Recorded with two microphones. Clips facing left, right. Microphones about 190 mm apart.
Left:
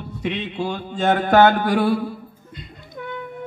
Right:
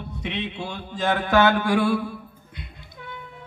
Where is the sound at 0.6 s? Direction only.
55° left (ahead or behind).